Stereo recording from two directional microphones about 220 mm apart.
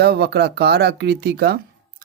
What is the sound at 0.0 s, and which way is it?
Speech, 50° right (ahead or behind).